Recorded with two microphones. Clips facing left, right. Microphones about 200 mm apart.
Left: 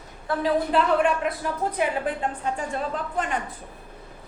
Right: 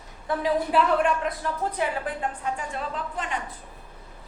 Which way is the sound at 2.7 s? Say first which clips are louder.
Left 4 dB; 50° left (ahead or behind).